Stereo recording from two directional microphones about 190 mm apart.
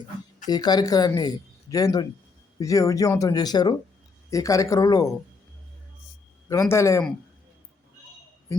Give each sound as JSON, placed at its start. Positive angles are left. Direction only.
{"t": 0.4, "sound": "speech", "side_deg": 20}
{"t": 6.5, "sound": "speech", "side_deg": 15}